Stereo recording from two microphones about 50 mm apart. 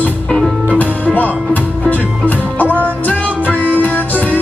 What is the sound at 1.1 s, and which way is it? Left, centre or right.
Music, left.